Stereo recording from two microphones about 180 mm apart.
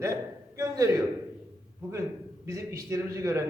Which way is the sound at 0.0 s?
15° right (ahead or behind).